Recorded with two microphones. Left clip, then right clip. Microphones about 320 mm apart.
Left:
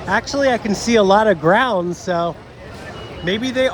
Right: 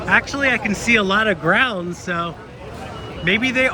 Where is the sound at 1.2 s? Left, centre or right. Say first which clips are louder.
Left 3 dB; right.